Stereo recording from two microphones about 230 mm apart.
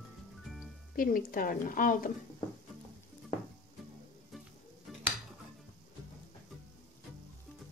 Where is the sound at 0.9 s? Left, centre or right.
Left.